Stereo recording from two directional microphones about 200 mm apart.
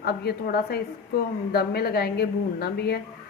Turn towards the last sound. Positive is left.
turn(degrees=55)  # may be behind; listen again after turning